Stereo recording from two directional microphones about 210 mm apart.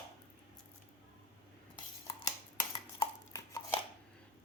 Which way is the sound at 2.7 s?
20° left (ahead or behind).